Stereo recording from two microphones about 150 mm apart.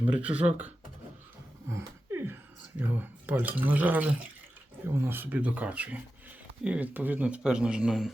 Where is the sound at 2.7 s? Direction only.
15° right (ahead or behind).